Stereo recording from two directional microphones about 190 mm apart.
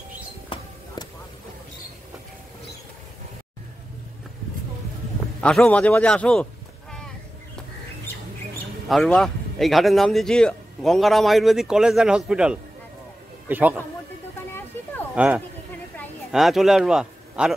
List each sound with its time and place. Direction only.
0.5 s shuffle: 25° left (ahead or behind)
5.4 s a man's voice: 5° left (ahead or behind)
8.8 s a man's voice: centre (ahead or behind)
15.1 s a man's voice: 5° right (ahead or behind)